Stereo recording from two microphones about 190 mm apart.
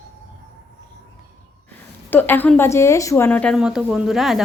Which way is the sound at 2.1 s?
10° left (ahead or behind).